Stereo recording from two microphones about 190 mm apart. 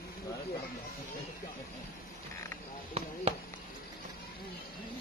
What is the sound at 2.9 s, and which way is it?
Basketball bounce, 30° right (ahead or behind).